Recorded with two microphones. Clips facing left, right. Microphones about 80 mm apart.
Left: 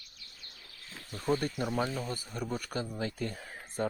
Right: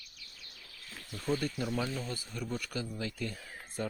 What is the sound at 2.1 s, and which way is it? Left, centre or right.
Speech, left.